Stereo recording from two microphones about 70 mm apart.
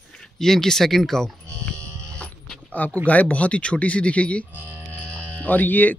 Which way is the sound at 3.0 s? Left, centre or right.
Left.